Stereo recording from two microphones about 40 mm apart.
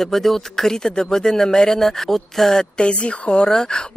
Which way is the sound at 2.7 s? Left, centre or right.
Left.